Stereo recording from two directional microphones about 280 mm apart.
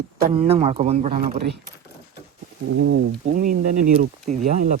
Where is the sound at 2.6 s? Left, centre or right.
Right.